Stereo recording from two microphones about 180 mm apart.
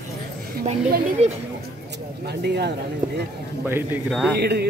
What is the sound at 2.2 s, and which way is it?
Speech, 70° right (ahead or behind).